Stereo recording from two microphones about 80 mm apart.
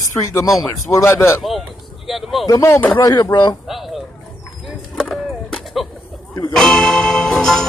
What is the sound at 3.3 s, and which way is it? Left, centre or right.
Speech, left.